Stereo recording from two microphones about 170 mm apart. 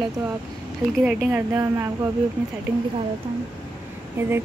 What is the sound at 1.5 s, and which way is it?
Speech, 20° right (ahead or behind).